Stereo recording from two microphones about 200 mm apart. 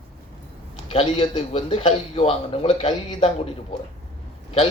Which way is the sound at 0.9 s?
25° left (ahead or behind).